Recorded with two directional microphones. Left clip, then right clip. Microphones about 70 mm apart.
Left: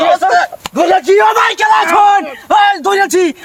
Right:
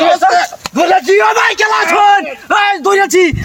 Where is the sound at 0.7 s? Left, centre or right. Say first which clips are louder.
Even; centre.